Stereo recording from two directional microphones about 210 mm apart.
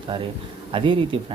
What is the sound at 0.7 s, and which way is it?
Speech, 25° right (ahead or behind).